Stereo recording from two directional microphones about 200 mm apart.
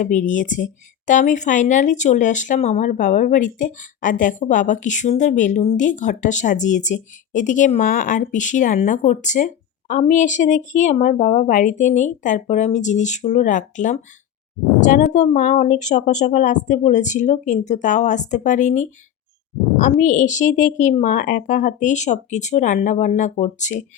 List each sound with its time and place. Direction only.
0.0 s speech: 40° left (ahead or behind)